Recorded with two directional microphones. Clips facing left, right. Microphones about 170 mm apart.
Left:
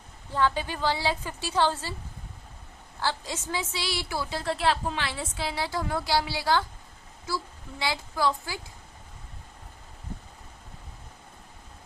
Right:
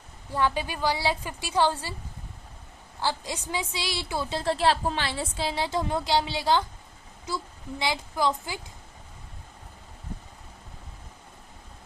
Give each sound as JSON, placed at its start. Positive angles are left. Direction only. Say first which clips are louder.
{"t": 0.3, "sound": "a woman's voice", "louder": "even", "side_deg": -10}
{"t": 3.0, "sound": "a woman's voice", "louder": "right 1 dB", "side_deg": -15}